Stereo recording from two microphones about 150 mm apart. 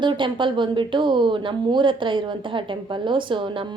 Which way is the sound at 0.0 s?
30° right (ahead or behind).